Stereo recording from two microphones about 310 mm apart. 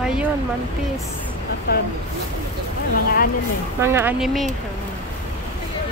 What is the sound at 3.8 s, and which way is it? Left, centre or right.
Speech, centre.